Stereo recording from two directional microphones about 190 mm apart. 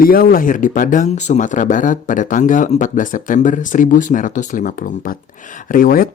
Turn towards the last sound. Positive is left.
turn(degrees=45)  # may be behind; listen again after turning